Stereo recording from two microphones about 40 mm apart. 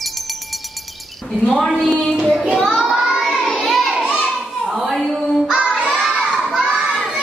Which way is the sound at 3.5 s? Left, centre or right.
Centre.